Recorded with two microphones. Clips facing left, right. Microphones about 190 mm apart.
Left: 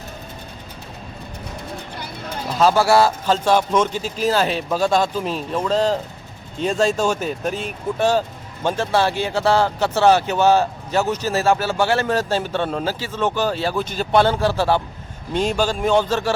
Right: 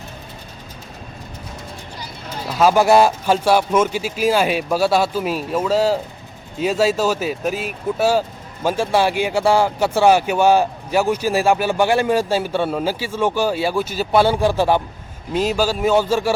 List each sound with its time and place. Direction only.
2.6 s speech: 15° right (ahead or behind)